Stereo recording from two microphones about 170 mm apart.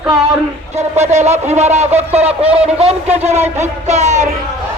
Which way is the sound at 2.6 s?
35° right (ahead or behind).